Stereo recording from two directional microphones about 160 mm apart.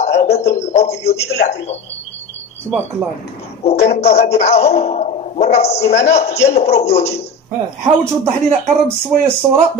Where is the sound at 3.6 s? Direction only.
40° left (ahead or behind).